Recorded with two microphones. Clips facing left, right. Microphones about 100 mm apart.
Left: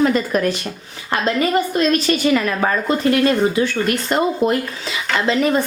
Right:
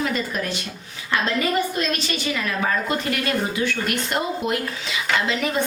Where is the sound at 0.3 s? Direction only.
55° left (ahead or behind).